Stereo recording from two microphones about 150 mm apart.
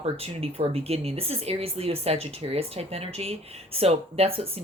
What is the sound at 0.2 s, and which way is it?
Speech, 40° right (ahead or behind).